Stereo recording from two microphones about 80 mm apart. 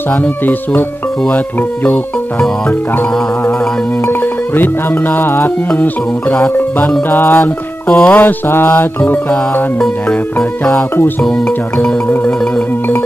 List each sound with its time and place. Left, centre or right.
0.1 s mantra: left
4.1 s music: left
7.1 s mantra: left
9.0 s music: centre
11.2 s music: centre